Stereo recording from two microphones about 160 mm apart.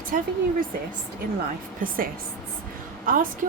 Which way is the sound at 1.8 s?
60° right (ahead or behind).